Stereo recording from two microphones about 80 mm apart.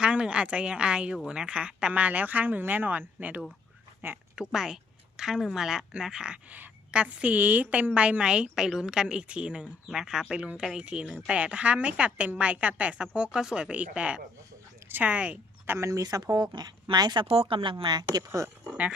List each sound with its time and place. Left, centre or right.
0.0 s speech: centre
4.4 s a woman's voice: centre
15.8 s speech: right
18.3 s speech: right
18.7 s a woman's voice: centre